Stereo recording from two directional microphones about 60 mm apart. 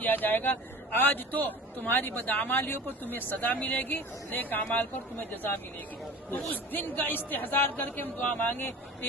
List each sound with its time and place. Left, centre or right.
0.0 s a man's voice: left
6.5 s a man's voice: left